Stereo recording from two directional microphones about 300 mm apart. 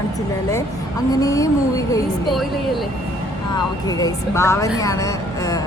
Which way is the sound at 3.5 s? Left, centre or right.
Centre.